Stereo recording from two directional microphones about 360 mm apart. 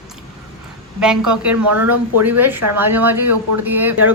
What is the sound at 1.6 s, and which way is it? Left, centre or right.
Speech, right.